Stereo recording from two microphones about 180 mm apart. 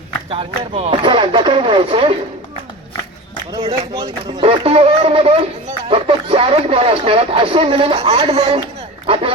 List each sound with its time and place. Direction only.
0.3 s speech: 30° right (ahead or behind)
3.5 s speech: 25° right (ahead or behind)